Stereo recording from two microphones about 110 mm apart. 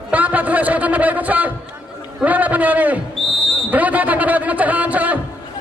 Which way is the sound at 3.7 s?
15° right (ahead or behind).